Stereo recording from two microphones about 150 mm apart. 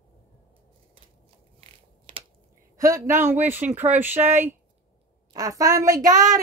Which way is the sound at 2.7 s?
20° right (ahead or behind).